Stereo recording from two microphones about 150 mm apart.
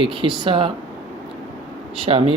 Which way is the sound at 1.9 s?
40° right (ahead or behind).